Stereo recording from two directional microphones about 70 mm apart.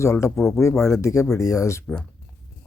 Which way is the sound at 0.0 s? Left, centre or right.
Left.